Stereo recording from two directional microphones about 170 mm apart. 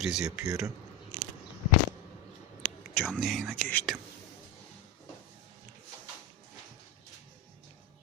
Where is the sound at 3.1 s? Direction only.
Centre (ahead or behind).